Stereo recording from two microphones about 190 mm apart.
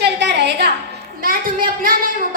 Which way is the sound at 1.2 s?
50° right (ahead or behind).